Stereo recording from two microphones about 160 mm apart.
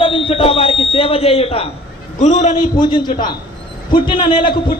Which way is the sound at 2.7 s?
25° left (ahead or behind).